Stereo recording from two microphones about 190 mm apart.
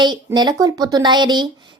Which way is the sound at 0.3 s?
20° right (ahead or behind).